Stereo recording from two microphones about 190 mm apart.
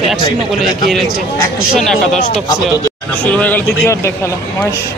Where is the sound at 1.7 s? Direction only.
Centre (ahead or behind).